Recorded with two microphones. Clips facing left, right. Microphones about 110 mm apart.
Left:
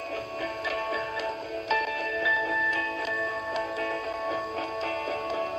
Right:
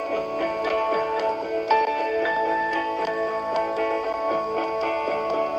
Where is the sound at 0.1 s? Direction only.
40° right (ahead or behind).